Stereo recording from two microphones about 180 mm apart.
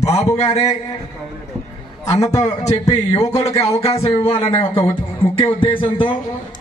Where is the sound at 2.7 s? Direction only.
20° left (ahead or behind).